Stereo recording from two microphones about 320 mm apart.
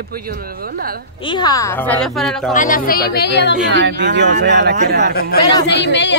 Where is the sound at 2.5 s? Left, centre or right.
Left.